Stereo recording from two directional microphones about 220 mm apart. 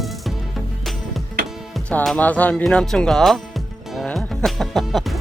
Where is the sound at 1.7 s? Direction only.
5° left (ahead or behind).